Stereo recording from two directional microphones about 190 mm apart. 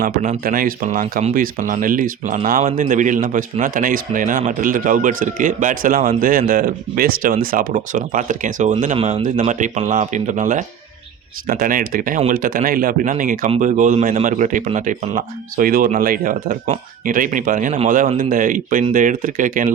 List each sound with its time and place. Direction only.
0.0 s speech: 45° right (ahead or behind)